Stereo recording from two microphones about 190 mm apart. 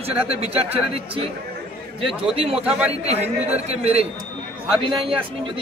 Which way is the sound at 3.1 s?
35° right (ahead or behind).